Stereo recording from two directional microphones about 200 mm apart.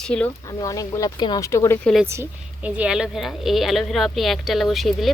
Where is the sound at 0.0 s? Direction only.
5° left (ahead or behind).